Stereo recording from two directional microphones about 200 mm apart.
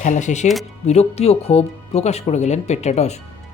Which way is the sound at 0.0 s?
40° left (ahead or behind).